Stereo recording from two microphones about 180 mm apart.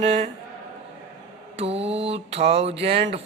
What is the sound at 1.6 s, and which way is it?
Music, 35° right (ahead or behind).